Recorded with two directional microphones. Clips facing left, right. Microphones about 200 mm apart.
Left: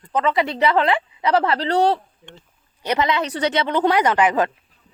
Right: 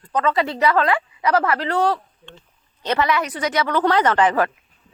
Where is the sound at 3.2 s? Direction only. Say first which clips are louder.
Left 1 dB; 30° left (ahead or behind); by 4.5 s 10° left (ahead or behind).